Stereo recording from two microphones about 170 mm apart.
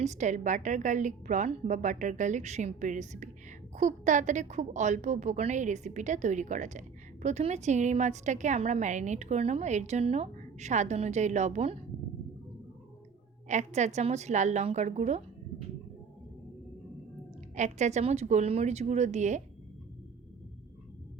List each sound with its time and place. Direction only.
0.0 s a woman's voice: 45° right (ahead or behind)
13.5 s a woman's voice: 45° right (ahead or behind)
17.5 s a woman's voice: 45° right (ahead or behind)